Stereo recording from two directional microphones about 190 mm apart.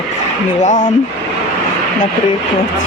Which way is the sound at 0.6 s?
40° left (ahead or behind).